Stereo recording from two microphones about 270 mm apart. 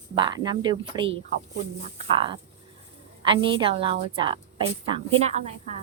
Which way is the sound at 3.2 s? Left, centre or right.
Centre.